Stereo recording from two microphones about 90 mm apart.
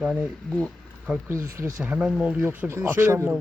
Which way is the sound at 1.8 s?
15° right (ahead or behind).